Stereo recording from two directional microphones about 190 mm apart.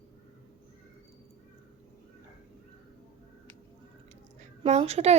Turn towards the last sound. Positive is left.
turn(degrees=-35)  # may be behind; listen again after turning